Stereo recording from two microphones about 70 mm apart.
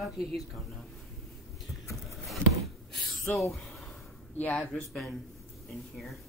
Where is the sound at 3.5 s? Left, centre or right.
Centre.